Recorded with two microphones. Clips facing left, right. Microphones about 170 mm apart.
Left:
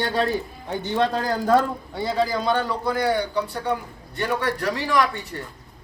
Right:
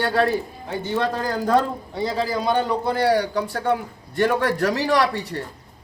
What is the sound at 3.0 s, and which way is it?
A man's voice, 40° right (ahead or behind).